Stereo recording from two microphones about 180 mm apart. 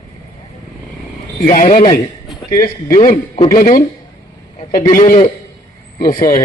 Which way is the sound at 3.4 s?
50° left (ahead or behind).